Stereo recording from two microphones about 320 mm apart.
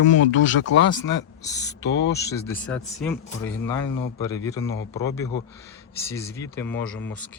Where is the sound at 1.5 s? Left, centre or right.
Centre.